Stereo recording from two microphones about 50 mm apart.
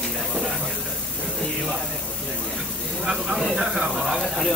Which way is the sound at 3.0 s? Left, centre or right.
Centre.